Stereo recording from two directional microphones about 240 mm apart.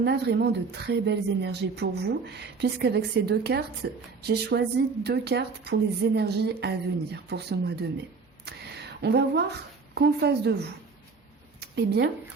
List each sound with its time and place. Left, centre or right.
0.0 s a woman's voice: right
8.5 s a sound: right
9.0 s a woman's voice: right